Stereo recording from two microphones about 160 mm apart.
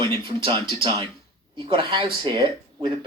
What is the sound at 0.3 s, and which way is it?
Speech, 30° right (ahead or behind).